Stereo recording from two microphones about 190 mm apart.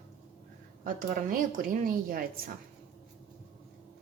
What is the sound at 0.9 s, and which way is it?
A woman's voice, 45° right (ahead or behind).